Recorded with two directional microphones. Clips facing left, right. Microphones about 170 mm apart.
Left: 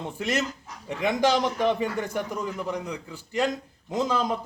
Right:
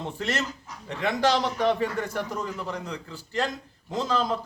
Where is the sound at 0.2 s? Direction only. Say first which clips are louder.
Left 4 dB; 10° left (ahead or behind).